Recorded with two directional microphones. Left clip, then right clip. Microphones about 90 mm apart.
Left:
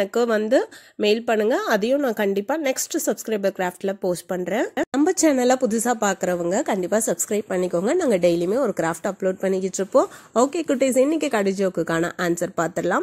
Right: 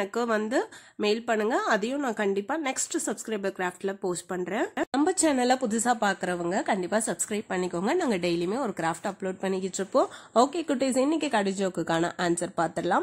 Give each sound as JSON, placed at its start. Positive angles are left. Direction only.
{"t": 0.0, "sound": "a woman's voice", "side_deg": 40}